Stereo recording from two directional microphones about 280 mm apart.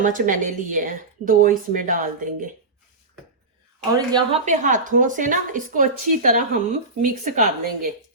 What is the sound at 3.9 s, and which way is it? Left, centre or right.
Speech, centre.